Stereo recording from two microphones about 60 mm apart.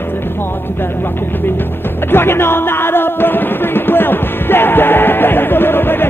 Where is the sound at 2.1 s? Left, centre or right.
Left.